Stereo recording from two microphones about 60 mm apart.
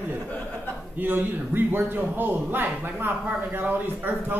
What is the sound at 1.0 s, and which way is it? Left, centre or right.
A man's voice, right.